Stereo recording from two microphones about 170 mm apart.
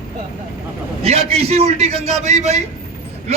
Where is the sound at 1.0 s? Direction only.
35° right (ahead or behind).